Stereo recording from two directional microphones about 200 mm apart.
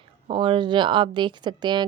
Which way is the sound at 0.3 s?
25° right (ahead or behind).